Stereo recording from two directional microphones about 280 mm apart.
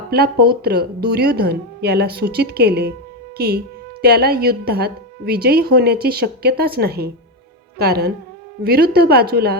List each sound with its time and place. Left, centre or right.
0.1 s a woman's voice: right